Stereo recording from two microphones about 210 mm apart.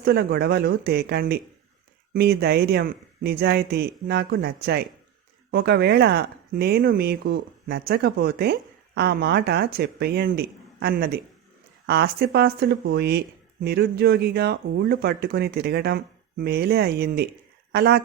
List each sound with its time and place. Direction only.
0.0 s speech: 50° right (ahead or behind)